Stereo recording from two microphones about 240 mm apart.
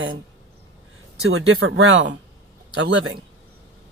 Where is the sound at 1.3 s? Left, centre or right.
Right.